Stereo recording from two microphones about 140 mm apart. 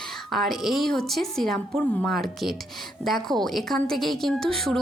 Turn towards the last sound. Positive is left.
turn(degrees=5)  # may be behind; listen again after turning